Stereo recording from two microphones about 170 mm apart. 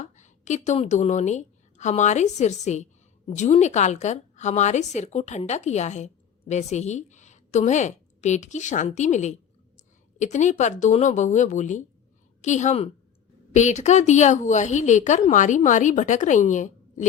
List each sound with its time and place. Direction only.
0.0 s a woman's voice: 45° left (ahead or behind)